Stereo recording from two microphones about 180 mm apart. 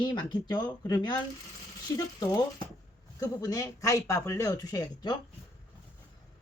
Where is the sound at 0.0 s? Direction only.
25° left (ahead or behind).